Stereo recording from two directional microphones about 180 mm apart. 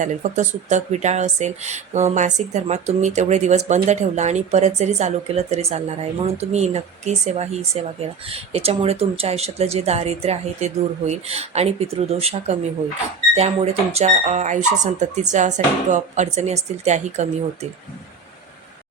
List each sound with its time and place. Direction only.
0.0 s speech: 40° right (ahead or behind)